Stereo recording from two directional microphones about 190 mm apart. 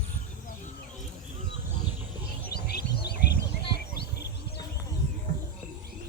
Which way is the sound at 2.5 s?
55° left (ahead or behind).